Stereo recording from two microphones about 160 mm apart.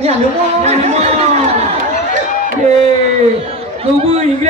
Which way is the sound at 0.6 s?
40° right (ahead or behind).